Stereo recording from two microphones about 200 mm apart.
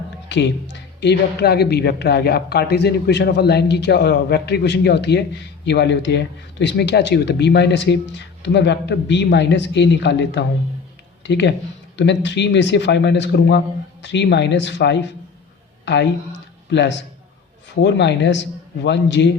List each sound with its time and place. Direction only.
0.3 s a man's voice: 60° left (ahead or behind)
16.6 s a man's voice: 60° left (ahead or behind)